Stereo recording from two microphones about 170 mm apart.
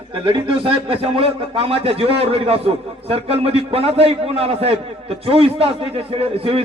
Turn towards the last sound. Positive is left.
turn(degrees=-35)  # may be behind; listen again after turning